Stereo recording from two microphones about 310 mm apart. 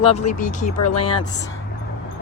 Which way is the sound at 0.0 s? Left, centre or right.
Left.